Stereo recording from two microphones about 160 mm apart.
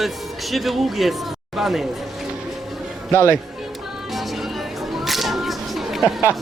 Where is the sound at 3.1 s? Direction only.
15° left (ahead or behind).